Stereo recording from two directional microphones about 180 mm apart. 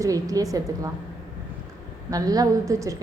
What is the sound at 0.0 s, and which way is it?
Speech, 20° right (ahead or behind).